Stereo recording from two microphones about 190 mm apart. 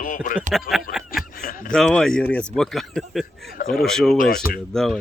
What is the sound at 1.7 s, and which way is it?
Speech, centre (ahead or behind).